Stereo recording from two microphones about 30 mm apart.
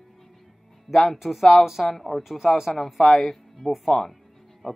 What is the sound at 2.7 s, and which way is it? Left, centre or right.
Speech, centre.